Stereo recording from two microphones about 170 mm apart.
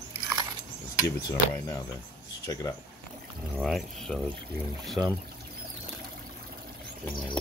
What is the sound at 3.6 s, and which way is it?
Speech, centre (ahead or behind).